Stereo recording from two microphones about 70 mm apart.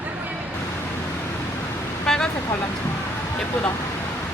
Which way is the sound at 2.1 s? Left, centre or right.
Centre.